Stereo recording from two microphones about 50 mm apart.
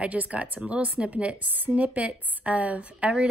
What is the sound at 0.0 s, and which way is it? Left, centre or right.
A woman's voice, right.